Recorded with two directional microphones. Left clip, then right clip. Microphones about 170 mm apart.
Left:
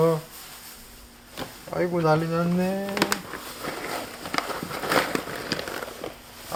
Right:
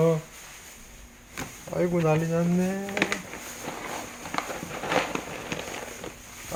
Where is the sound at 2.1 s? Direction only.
5° right (ahead or behind).